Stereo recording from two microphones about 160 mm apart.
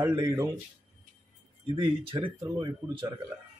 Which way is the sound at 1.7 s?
30° right (ahead or behind).